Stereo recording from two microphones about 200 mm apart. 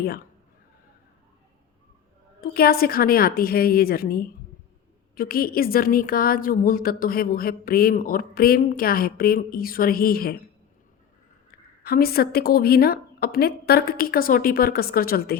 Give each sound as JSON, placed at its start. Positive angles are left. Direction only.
{"t": 2.4, "sound": "a woman's voice", "side_deg": 50}
{"t": 11.8, "sound": "a woman's voice", "side_deg": 50}